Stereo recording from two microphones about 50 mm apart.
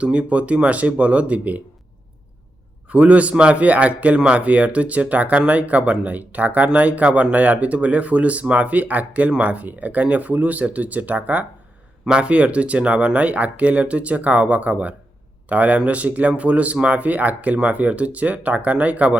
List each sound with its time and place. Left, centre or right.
0.0 s speech: right
2.9 s speech: right